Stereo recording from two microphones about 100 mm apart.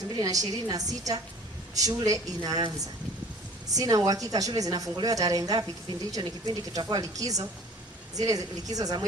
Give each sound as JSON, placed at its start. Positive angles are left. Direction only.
{"t": 0.2, "sound": "a woman's voice", "side_deg": -40}
{"t": 3.7, "sound": "a woman's voice", "side_deg": -35}